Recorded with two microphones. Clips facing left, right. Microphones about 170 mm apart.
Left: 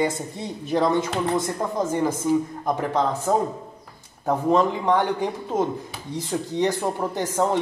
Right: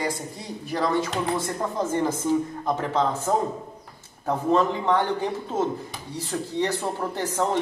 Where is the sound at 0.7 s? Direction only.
20° left (ahead or behind).